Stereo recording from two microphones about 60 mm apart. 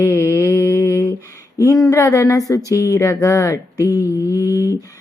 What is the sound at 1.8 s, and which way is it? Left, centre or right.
Speech, left.